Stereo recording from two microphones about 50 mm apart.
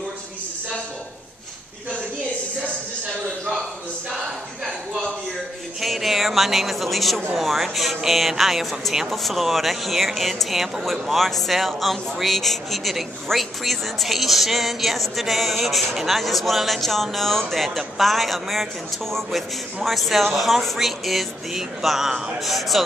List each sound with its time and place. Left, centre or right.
5.8 s speech: centre